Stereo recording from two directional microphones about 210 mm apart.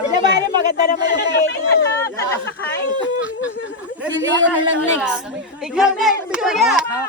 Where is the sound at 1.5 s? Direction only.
55° left (ahead or behind).